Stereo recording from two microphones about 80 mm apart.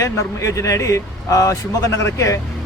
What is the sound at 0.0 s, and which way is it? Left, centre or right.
Speech, left.